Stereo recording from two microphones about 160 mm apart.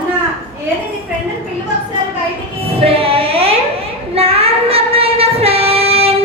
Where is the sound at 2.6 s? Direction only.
35° right (ahead or behind).